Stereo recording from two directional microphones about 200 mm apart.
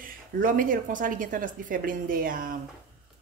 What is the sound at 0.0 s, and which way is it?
Speech, 45° right (ahead or behind).